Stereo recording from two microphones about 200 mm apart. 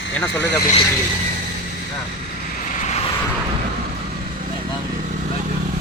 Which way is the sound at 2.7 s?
35° left (ahead or behind).